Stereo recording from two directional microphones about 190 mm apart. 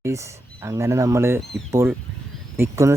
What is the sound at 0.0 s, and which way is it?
Speech, 15° right (ahead or behind).